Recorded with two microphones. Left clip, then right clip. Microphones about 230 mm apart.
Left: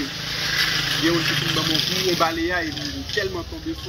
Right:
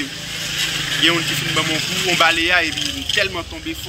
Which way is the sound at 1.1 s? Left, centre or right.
Right.